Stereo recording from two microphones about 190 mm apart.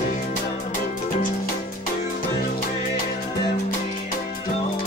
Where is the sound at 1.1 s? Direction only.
45° left (ahead or behind).